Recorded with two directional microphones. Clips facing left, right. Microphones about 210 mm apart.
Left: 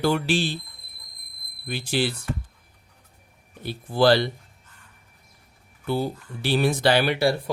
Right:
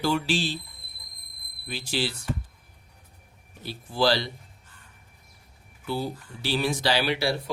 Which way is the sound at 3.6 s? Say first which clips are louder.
Left 5 dB; 55° left (ahead or behind).